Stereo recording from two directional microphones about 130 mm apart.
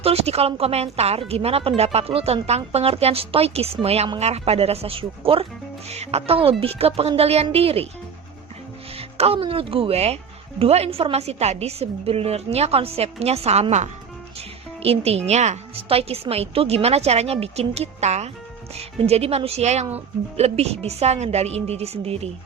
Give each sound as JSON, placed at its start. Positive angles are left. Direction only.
{"t": 0.0, "sound": "a woman's voice", "side_deg": -50}
{"t": 9.0, "sound": "a woman's voice", "side_deg": -50}
{"t": 14.8, "sound": "a woman's voice", "side_deg": -50}